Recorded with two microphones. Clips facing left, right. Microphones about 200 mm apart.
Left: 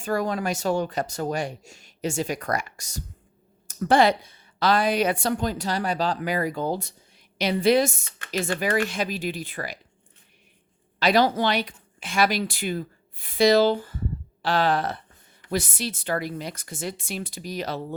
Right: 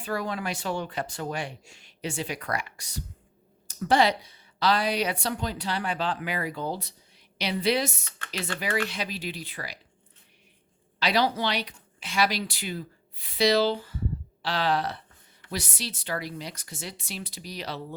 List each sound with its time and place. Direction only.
0.0 s a woman's voice: 45° left (ahead or behind)
11.0 s a woman's voice: 50° left (ahead or behind)